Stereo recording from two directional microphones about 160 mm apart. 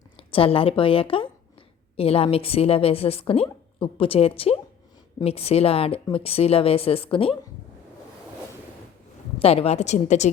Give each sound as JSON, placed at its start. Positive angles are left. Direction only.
{"t": 0.2, "sound": "a woman's voice", "side_deg": 35}
{"t": 9.4, "sound": "a woman's voice", "side_deg": 40}